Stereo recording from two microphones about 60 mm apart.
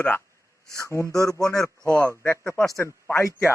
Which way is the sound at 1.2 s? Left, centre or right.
Left.